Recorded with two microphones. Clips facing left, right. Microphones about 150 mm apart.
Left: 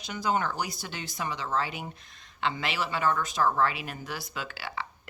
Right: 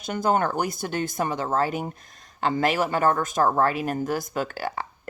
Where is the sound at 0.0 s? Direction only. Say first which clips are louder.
Right 6 dB; 50° right (ahead or behind).